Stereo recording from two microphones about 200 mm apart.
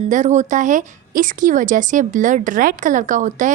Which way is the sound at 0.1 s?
35° right (ahead or behind).